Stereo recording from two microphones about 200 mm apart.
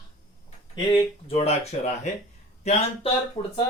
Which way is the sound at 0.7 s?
25° left (ahead or behind).